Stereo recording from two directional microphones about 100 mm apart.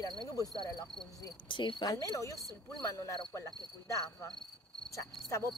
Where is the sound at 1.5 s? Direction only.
55° left (ahead or behind).